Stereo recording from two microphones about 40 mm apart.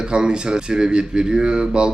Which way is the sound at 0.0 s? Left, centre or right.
Right.